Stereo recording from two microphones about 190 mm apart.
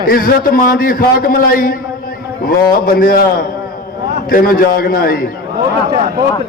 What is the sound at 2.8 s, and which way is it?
A man's voice, 50° left (ahead or behind).